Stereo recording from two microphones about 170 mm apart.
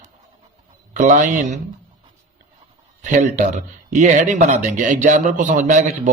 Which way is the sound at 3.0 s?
45° right (ahead or behind).